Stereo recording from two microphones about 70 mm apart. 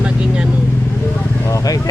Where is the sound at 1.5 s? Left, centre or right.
Left.